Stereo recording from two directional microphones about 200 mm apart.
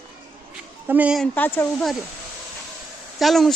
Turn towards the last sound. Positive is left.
turn(degrees=0)  # may be behind; listen again after turning